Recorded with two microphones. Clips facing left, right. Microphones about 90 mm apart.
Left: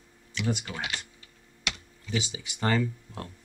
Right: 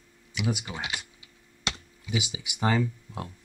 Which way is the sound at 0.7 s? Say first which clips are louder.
Even; 20° right (ahead or behind).